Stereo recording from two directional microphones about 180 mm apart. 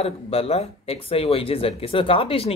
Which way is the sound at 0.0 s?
35° left (ahead or behind).